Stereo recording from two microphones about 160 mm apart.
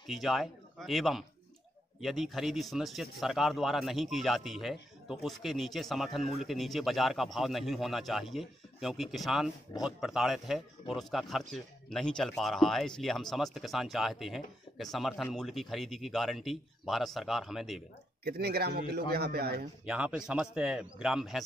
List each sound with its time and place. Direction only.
0.0 s speech: centre (ahead or behind)
18.2 s a man's voice: 80° right
19.8 s speech: 5° right (ahead or behind)